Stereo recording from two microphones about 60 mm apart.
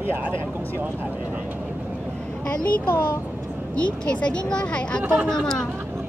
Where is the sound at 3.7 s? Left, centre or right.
Centre.